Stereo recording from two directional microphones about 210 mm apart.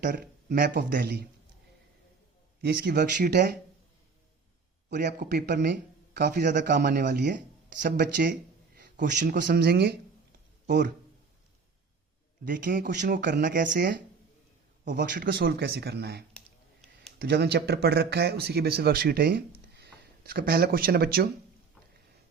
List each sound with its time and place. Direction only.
0.0 s speech: 45° right (ahead or behind)
2.6 s speech: 50° right (ahead or behind)
4.9 s speech: 55° right (ahead or behind)
7.8 s speech: 40° right (ahead or behind)
12.5 s speech: 45° right (ahead or behind)
13.7 s speech: 55° right (ahead or behind)
14.8 s speech: 45° right (ahead or behind)